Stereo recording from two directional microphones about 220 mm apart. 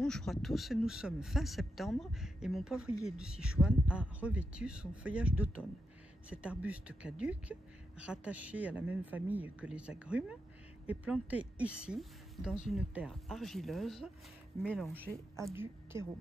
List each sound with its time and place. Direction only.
0.0 s a woman's voice: 5° left (ahead or behind)